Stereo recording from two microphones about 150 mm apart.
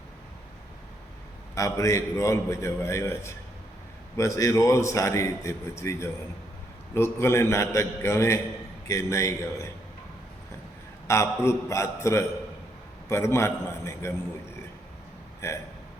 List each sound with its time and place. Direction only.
1.5 s a man's voice: 20° left (ahead or behind)
11.1 s a man's voice: 20° left (ahead or behind)
15.4 s a man's voice: 20° left (ahead or behind)